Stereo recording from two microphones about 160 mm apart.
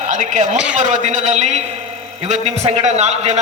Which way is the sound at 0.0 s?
50° right (ahead or behind).